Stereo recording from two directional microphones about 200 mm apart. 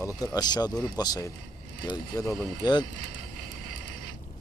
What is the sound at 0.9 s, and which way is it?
Speech, 20° left (ahead or behind).